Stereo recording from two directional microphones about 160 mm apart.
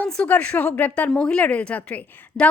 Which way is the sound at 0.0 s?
10° left (ahead or behind).